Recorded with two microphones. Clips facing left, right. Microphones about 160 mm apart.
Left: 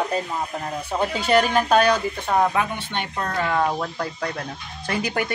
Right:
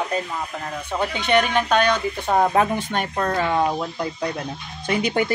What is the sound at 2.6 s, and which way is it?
Speech, 40° right (ahead or behind).